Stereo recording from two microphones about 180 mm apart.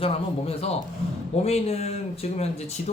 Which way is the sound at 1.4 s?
35° left (ahead or behind).